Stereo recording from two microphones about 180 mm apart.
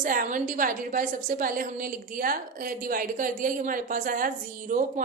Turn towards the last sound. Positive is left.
turn(degrees=-45)  # may be behind; listen again after turning